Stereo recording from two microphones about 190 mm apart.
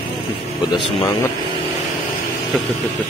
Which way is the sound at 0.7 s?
25° left (ahead or behind).